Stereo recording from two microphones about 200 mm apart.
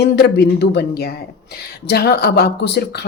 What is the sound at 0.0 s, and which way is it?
A woman's voice, 55° left (ahead or behind).